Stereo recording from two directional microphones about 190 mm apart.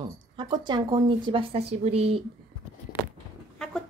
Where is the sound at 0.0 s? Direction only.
25° right (ahead or behind).